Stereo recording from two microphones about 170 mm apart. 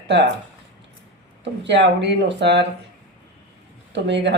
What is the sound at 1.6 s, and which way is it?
Speech, 90° right.